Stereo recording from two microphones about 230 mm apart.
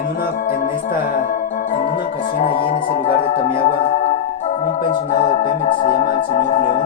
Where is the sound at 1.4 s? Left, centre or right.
Left.